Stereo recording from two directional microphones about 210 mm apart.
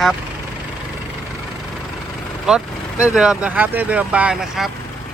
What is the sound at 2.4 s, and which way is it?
Speech, 5° right (ahead or behind).